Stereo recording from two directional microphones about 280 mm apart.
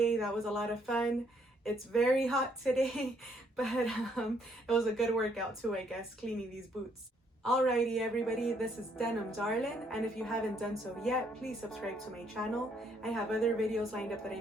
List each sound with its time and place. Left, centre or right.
0.0 s speech: centre
7.4 s speech: centre